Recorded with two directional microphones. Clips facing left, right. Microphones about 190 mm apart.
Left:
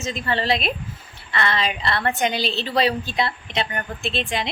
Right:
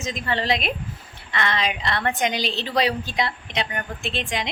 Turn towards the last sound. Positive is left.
turn(degrees=-15)  # may be behind; listen again after turning